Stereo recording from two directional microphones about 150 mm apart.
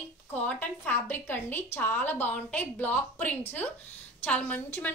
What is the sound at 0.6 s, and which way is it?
A woman's voice, 10° left (ahead or behind).